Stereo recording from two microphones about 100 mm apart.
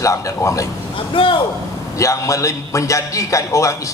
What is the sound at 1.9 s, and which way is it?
A man's voice, 30° left (ahead or behind).